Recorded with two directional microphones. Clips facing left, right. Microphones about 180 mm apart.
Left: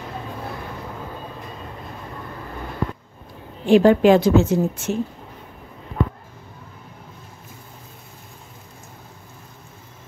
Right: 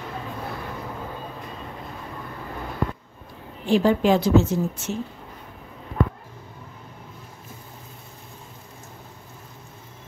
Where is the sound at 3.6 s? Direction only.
65° left (ahead or behind).